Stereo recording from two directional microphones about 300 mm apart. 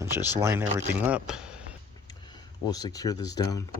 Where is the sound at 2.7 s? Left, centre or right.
Centre.